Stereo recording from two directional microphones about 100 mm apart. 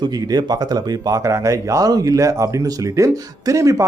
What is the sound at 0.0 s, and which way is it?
Speech, 45° right (ahead or behind).